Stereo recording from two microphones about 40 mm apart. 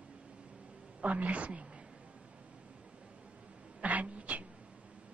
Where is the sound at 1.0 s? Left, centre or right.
Right.